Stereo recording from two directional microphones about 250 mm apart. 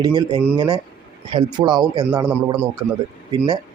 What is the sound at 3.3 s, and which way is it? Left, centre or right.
Speech, right.